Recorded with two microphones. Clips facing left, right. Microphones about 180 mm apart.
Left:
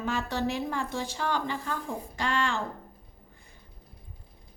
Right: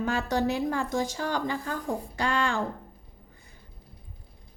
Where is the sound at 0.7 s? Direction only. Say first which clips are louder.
Right 4 dB; 40° right (ahead or behind).